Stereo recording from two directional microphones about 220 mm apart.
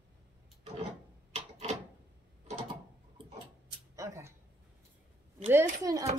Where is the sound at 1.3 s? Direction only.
30° right (ahead or behind).